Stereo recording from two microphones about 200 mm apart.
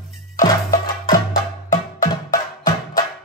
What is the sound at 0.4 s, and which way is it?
Music, 45° left (ahead or behind).